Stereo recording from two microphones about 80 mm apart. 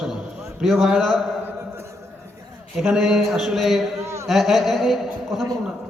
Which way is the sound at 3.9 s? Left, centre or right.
Right.